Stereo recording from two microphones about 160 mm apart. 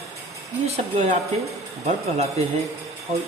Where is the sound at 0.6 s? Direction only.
40° right (ahead or behind).